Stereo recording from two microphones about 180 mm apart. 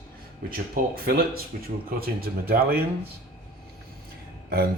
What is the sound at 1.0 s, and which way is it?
Speech, 55° right (ahead or behind).